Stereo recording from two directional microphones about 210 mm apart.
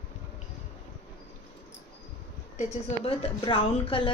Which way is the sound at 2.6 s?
25° left (ahead or behind).